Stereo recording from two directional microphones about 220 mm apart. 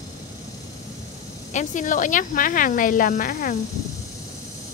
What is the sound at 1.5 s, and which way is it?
Speech, 35° left (ahead or behind).